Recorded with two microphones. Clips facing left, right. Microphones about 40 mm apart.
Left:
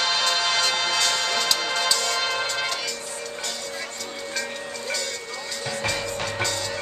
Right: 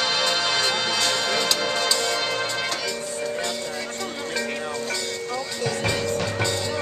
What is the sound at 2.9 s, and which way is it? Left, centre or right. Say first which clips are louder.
Music: right 5 dB; centre.